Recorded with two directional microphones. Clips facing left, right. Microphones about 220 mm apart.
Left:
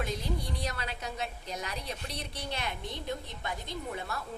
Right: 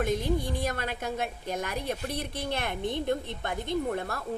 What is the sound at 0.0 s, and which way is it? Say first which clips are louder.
A woman's voice: right 7 dB; 50° right (ahead or behind).